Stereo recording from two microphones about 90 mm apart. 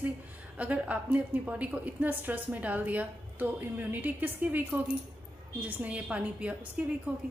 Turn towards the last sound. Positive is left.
turn(degrees=-15)  # may be behind; listen again after turning